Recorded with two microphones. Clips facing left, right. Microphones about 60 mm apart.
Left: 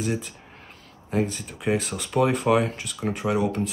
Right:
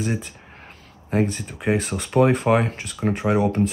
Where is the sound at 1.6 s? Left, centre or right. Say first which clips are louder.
Right 2 dB; right.